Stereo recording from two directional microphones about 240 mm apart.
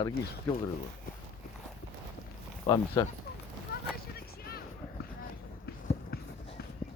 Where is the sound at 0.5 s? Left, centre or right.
Centre.